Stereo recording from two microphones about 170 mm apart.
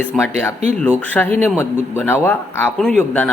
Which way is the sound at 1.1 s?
10° left (ahead or behind).